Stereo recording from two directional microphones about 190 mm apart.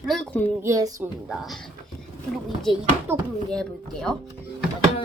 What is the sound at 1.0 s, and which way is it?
Speech, 5° right (ahead or behind).